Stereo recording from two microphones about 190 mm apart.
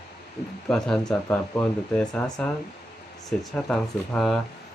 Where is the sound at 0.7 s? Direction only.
5° left (ahead or behind).